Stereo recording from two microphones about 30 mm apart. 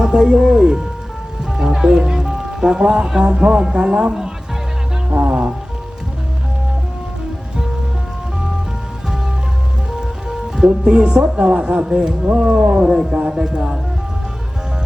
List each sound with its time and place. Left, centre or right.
0.0 s music: right
1.5 s speech: right
5.1 s speech: right
9.9 s music: right
11.3 s speech: right
11.6 s speech: right
12.7 s speech: right